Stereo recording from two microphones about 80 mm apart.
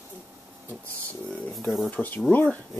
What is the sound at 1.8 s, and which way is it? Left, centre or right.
Speech, left.